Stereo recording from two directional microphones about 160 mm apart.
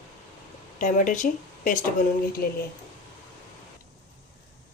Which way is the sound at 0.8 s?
55° left (ahead or behind).